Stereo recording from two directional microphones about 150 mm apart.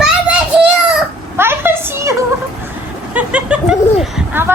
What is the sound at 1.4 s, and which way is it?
Speech, 15° right (ahead or behind).